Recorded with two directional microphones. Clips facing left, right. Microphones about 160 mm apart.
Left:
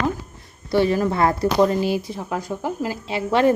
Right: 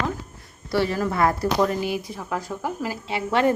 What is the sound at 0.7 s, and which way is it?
A woman's voice, 20° left (ahead or behind).